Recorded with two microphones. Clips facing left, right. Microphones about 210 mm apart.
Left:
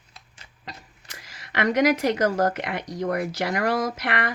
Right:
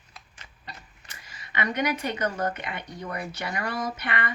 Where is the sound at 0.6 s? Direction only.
90° left.